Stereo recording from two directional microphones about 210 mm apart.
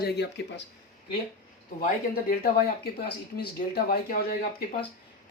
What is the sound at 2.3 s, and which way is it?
Speech, 45° left (ahead or behind).